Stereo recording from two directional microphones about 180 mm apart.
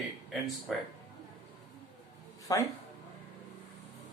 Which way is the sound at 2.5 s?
20° left (ahead or behind).